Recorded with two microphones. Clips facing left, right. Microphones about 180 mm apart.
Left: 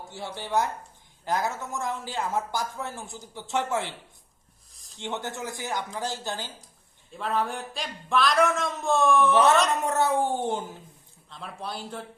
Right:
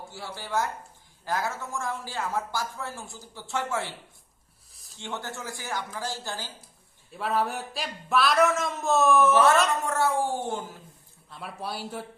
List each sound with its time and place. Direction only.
0.1 s speech: 20° left (ahead or behind)
4.9 s speech: 20° left (ahead or behind)
7.1 s speech: 5° right (ahead or behind)
9.8 s speech: 20° left (ahead or behind)
11.3 s speech: 5° right (ahead or behind)